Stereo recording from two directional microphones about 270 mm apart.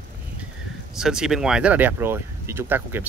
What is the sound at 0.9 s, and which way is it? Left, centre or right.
Speech, centre.